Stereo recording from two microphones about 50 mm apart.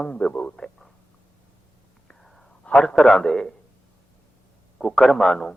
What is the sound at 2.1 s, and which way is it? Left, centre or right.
Whispering, centre.